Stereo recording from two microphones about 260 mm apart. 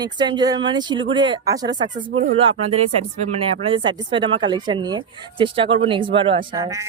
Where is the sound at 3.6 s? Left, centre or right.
Centre.